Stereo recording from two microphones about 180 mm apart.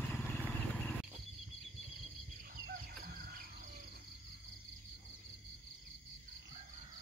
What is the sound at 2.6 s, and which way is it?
Chicken, 55° right (ahead or behind).